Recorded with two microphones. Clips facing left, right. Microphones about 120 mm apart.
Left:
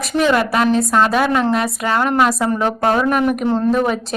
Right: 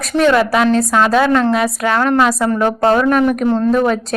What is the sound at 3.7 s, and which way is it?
Speech, 5° left (ahead or behind).